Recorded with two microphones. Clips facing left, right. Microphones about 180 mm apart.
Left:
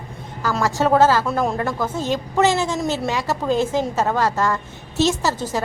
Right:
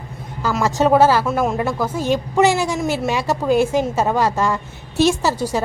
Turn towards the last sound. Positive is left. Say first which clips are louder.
# right 3 dB
turn(degrees=-10)  # may be behind; listen again after turning